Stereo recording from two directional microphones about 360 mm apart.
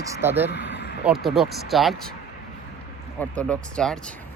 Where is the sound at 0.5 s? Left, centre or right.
Left.